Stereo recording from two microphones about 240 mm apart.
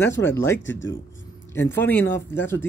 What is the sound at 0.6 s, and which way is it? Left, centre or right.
Speech, left.